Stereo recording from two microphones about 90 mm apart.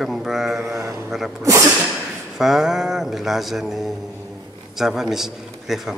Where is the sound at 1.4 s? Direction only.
35° right (ahead or behind).